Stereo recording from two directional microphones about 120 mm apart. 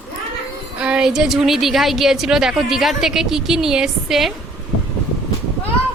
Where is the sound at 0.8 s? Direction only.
5° right (ahead or behind).